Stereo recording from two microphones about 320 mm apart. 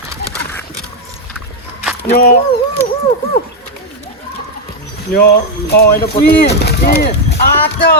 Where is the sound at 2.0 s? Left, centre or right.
Left.